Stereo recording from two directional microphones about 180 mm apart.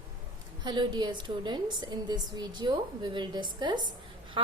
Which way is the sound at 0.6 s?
25° right (ahead or behind).